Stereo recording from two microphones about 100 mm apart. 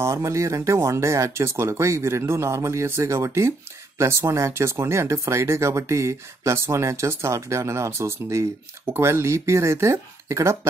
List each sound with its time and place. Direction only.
0.0 s speech: 30° right (ahead or behind)